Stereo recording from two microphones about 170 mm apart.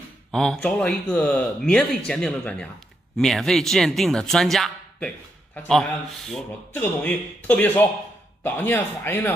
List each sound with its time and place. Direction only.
0.3 s speech: 5° left (ahead or behind)